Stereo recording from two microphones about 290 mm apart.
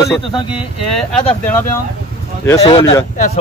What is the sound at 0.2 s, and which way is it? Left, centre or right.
Speech, centre.